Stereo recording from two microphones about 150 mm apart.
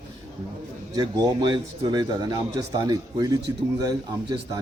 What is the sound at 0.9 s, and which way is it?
A man's voice, 30° right (ahead or behind).